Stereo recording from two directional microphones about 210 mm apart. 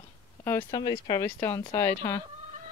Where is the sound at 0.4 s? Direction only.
10° left (ahead or behind).